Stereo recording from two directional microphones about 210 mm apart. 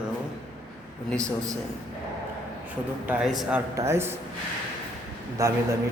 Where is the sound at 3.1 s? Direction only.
5° right (ahead or behind).